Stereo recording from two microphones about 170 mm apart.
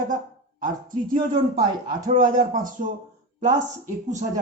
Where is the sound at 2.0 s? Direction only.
50° right (ahead or behind).